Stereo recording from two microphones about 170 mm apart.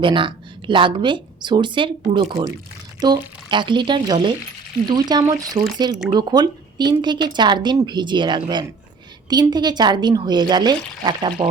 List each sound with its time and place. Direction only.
0.0 s a woman's voice: 30° right (ahead or behind)